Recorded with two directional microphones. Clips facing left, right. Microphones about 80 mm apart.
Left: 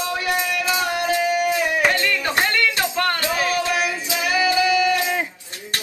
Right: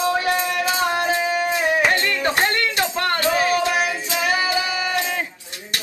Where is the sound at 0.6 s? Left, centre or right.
Right.